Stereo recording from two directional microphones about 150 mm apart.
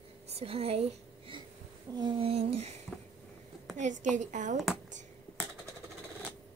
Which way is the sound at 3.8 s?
55° right (ahead or behind).